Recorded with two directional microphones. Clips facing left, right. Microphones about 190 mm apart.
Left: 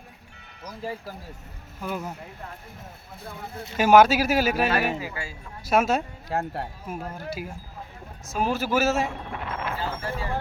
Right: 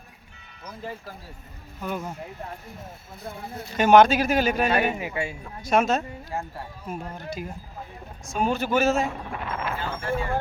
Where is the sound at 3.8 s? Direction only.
5° left (ahead or behind).